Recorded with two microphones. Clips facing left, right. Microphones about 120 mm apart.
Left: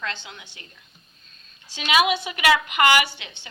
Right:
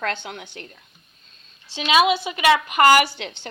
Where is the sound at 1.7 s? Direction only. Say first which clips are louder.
Right 3 dB; 25° right (ahead or behind).